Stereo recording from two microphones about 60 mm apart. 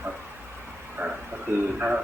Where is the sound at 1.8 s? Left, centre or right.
Centre.